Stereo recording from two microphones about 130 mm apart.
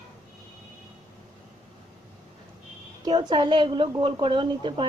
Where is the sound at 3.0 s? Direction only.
35° right (ahead or behind).